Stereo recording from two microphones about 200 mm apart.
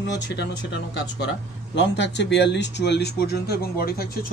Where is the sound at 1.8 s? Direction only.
60° left (ahead or behind).